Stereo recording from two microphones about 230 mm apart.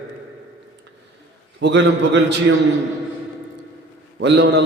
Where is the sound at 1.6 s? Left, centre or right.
Right.